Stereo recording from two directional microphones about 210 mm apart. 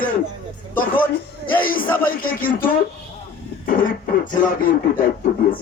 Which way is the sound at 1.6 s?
40° left (ahead or behind).